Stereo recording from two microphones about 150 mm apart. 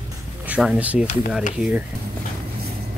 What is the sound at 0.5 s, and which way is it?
Speech, 10° right (ahead or behind).